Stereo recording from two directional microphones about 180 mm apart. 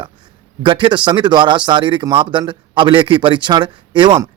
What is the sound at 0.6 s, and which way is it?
Speech, 25° right (ahead or behind).